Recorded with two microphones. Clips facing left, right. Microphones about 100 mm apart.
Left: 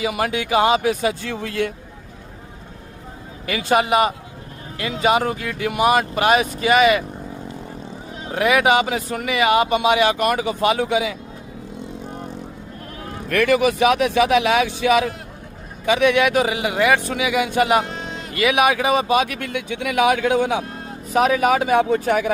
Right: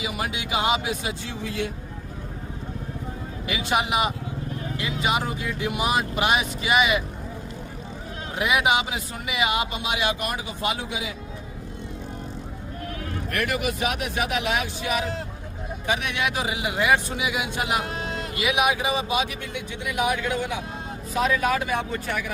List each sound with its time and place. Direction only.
0.0 s speech: 55° left (ahead or behind)
3.4 s speech: 50° left (ahead or behind)
4.8 s speech: 55° left (ahead or behind)
8.4 s speech: 55° left (ahead or behind); by 11.1 s 80° left
13.3 s speech: 90° left
21.1 s speech: 70° left (ahead or behind)